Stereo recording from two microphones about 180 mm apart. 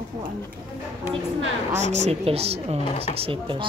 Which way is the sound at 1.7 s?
40° right (ahead or behind).